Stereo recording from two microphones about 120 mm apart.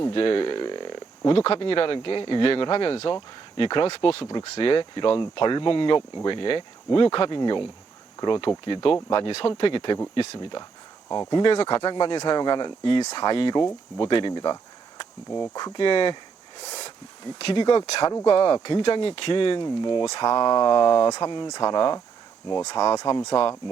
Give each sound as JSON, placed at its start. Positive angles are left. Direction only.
{"t": 0.0, "sound": "a sound", "side_deg": 50}
{"t": 1.4, "sound": "speech", "side_deg": 50}
{"t": 11.5, "sound": "speech", "side_deg": 50}
{"t": 11.9, "sound": "speech", "side_deg": 35}
{"t": 17.4, "sound": "speech", "side_deg": 45}
{"t": 18.1, "sound": "speech", "side_deg": 25}
{"t": 18.3, "sound": "speech", "side_deg": 45}